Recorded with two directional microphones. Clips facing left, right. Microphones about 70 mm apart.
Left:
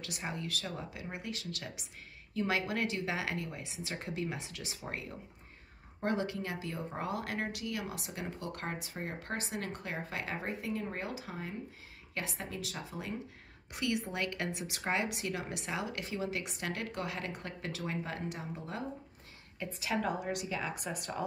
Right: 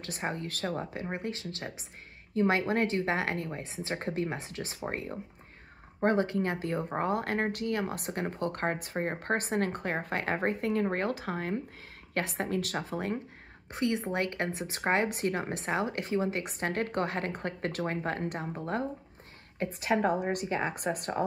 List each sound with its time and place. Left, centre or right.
0.0 s speech: right
13.7 s speech: right